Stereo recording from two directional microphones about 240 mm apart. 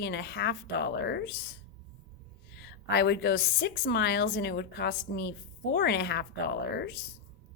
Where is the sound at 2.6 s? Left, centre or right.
Left.